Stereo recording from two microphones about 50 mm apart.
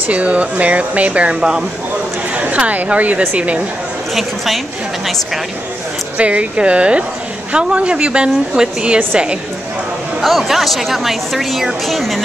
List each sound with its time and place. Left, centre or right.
0.1 s a woman's voice: right
4.1 s speech: centre
6.1 s a woman's voice: right
10.2 s speech: centre